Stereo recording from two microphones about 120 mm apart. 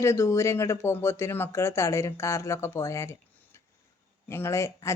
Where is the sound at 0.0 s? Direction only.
25° left (ahead or behind).